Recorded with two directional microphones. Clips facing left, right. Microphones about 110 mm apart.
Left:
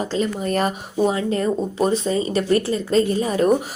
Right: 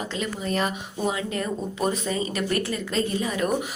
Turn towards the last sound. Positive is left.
turn(degrees=40)  # may be behind; listen again after turning